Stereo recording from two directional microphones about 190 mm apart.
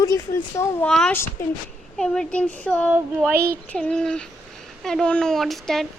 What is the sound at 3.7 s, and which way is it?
Speech, 5° left (ahead or behind).